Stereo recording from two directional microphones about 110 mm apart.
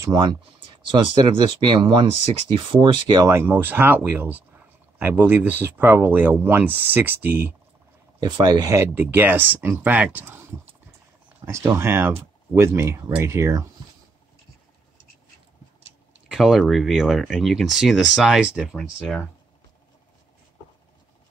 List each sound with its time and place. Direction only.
0.8 s speech: 45° right (ahead or behind)
3.3 s speech: 20° right (ahead or behind)
8.2 s speech: 40° right (ahead or behind)
8.6 s speech: 20° right (ahead or behind)
11.4 s speech: 25° right (ahead or behind)
16.3 s speech: centre (ahead or behind)
18.8 s speech: centre (ahead or behind)